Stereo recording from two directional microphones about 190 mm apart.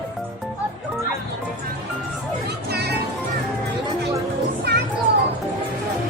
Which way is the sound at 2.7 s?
60° right (ahead or behind).